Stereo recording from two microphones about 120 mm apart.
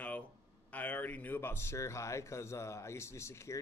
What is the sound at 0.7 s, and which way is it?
A man's voice, 15° left (ahead or behind).